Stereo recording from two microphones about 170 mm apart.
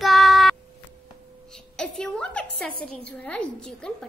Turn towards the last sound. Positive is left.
turn(degrees=5)  # may be behind; listen again after turning